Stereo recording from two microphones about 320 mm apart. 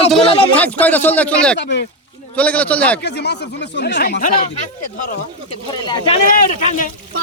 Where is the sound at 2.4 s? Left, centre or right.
Centre.